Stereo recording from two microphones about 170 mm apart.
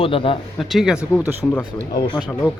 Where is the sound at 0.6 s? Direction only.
Centre (ahead or behind).